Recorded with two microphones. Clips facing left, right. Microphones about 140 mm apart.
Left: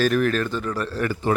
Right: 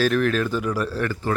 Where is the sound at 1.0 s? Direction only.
15° left (ahead or behind).